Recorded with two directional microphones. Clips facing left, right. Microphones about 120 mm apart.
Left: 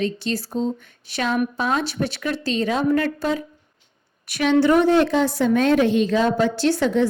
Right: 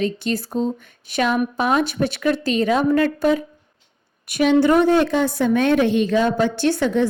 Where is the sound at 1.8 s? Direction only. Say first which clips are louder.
Right 4 dB; 50° right (ahead or behind).